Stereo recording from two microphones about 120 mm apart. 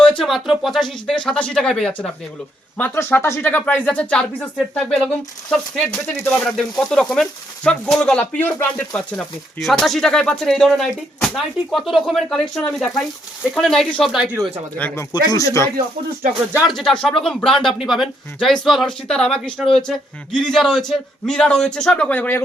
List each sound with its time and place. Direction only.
0.0 s speech: 5° left (ahead or behind)
2.7 s speech: 20° left (ahead or behind)
9.1 s speech: centre (ahead or behind)
14.8 s speech: 15° left (ahead or behind)
15.1 s speech: 30° left (ahead or behind)
16.6 s speech: centre (ahead or behind)